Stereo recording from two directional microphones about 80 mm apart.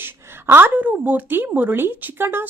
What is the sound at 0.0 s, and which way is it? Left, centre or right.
A woman's voice, right.